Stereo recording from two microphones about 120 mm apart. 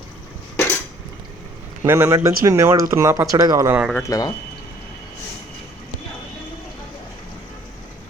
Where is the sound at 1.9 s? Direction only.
20° right (ahead or behind).